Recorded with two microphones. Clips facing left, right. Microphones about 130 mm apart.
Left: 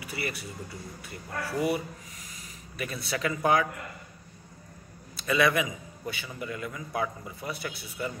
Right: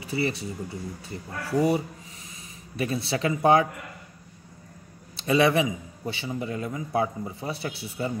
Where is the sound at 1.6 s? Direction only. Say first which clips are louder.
Right 6 dB; 30° right (ahead or behind).